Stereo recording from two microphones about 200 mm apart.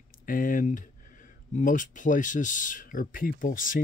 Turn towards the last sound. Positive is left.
turn(degrees=40)  # may be behind; listen again after turning